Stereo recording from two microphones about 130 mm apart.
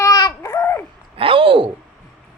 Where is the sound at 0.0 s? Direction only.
30° left (ahead or behind).